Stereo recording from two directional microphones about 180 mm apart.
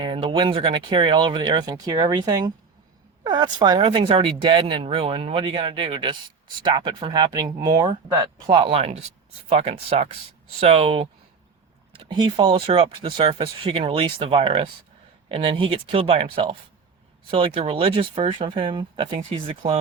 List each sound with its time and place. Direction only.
0.0 s speech: 25° right (ahead or behind)